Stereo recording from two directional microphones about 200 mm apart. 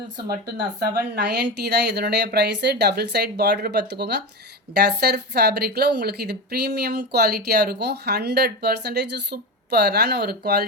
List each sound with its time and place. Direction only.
0.2 s speech: 55° right (ahead or behind)